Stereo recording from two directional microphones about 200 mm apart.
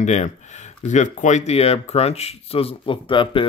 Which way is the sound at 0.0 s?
35° left (ahead or behind).